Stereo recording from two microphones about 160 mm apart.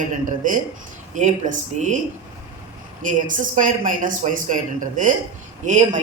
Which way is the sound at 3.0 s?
55° right (ahead or behind).